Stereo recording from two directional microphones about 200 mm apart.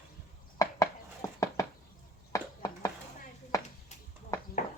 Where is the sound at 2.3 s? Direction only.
15° left (ahead or behind).